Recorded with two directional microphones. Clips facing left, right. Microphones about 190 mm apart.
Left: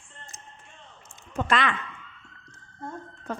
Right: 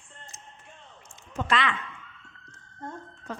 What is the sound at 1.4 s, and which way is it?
Speech, 50° left (ahead or behind).